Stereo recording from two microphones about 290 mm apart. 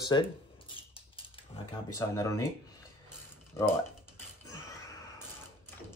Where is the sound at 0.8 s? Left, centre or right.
Centre.